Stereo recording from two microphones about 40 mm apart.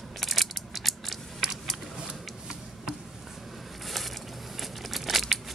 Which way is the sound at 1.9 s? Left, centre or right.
Centre.